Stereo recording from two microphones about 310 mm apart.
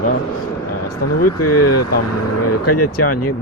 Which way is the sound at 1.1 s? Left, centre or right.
Left.